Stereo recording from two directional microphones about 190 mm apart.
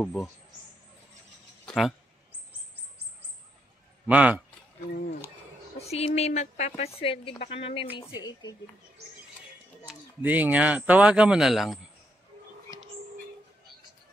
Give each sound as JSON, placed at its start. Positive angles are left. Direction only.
{"t": 0.0, "sound": "speech", "side_deg": 5}
{"t": 1.7, "sound": "speech", "side_deg": 0}
{"t": 4.1, "sound": "speech", "side_deg": -5}
{"t": 5.8, "sound": "speech", "side_deg": 35}
{"t": 10.2, "sound": "speech", "side_deg": -10}